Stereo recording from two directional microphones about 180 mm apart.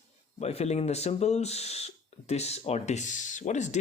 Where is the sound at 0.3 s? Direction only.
35° left (ahead or behind).